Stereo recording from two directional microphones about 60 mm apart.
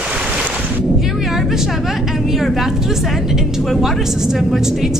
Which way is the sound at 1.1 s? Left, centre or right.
Centre.